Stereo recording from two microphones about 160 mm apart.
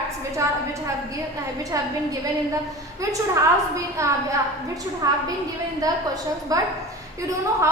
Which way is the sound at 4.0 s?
20° right (ahead or behind).